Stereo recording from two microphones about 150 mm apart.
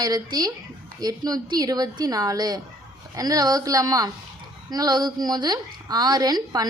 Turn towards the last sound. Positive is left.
turn(degrees=-25)  # may be behind; listen again after turning